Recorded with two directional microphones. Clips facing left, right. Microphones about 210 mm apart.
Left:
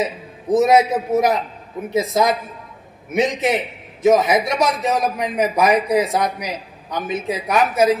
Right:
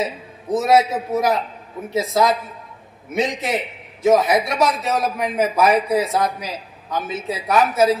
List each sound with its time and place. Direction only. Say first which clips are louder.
0.0 s a man's voice: left 2 dB; 20° left (ahead or behind)